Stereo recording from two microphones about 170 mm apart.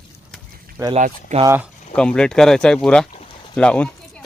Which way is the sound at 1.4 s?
10° right (ahead or behind).